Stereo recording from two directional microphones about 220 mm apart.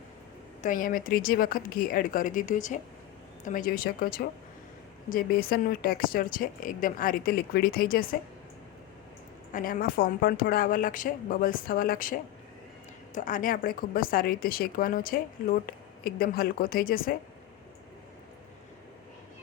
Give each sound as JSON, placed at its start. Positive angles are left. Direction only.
{"t": 0.6, "sound": "a woman's voice", "side_deg": 40}
{"t": 9.5, "sound": "a woman's voice", "side_deg": 35}